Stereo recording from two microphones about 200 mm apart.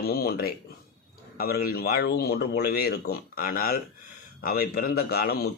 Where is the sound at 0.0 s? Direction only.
50° left (ahead or behind).